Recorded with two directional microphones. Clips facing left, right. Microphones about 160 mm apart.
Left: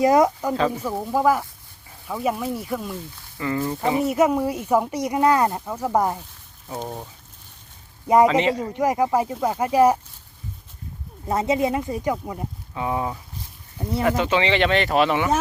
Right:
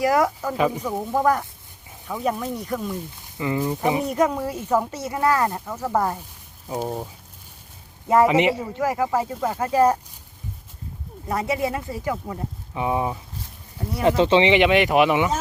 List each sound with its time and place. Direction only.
0.0 s speech: 20° left (ahead or behind)
0.5 s speech: 15° right (ahead or behind)
0.8 s speech: 5° left (ahead or behind)
2.9 s speech: 15° right (ahead or behind)
4.0 s speech: 10° left (ahead or behind)
6.7 s speech: 10° right (ahead or behind)
8.0 s speech: 20° left (ahead or behind)
8.3 s speech: 15° right (ahead or behind)
8.7 s speech: 20° left (ahead or behind)
11.3 s speech: 20° left (ahead or behind)
12.7 s speech: 20° right (ahead or behind)